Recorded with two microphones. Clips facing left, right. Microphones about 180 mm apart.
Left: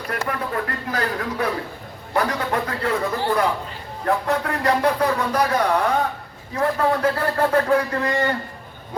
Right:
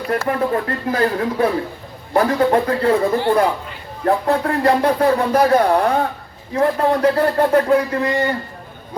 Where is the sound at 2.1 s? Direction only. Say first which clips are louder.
Right 7 dB; 30° right (ahead or behind).